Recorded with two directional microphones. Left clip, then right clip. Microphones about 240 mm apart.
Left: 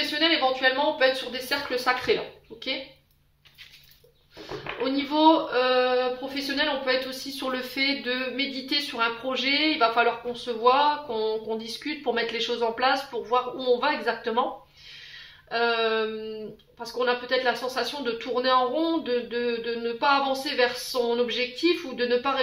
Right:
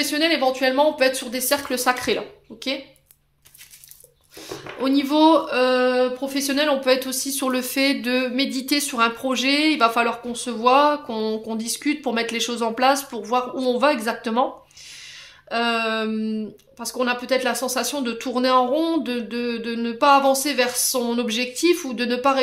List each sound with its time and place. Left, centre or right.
0.1 s speech: right
4.8 s speech: right
15.5 s speech: right